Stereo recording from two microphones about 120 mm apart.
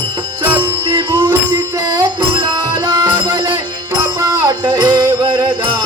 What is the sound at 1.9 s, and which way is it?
Music, 35° right (ahead or behind).